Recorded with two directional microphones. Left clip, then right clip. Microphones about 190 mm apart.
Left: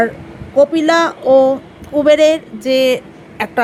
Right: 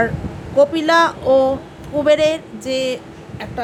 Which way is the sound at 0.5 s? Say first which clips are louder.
Left 2 dB; 15° left (ahead or behind).